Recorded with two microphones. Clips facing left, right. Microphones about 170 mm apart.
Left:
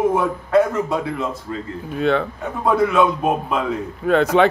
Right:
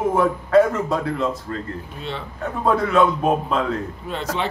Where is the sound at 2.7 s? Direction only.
10° left (ahead or behind).